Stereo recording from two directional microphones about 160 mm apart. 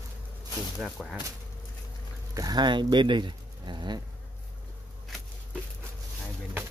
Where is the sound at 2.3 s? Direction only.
25° right (ahead or behind).